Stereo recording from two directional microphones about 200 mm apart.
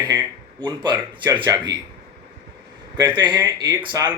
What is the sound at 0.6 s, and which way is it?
Speech, 20° right (ahead or behind).